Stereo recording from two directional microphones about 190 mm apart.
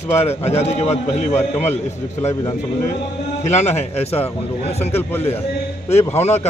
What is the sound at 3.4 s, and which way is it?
A man's voice, 35° left (ahead or behind).